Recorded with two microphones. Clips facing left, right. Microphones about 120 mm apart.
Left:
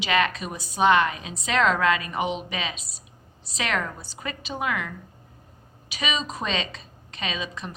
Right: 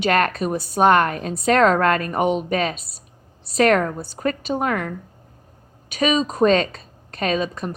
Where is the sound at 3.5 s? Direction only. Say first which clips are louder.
Right 11 dB; 45° right (ahead or behind).